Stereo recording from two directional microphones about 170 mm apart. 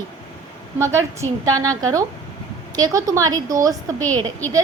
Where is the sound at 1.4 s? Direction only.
20° right (ahead or behind).